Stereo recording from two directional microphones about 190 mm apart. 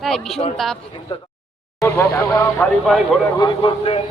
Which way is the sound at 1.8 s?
15° left (ahead or behind).